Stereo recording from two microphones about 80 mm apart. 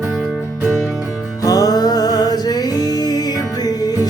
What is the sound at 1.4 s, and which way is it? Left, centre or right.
Music, left.